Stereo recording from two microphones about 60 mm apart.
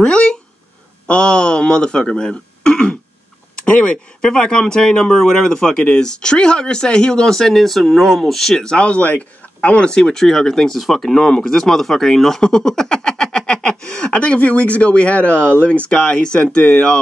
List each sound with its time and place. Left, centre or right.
0.0 s speech: centre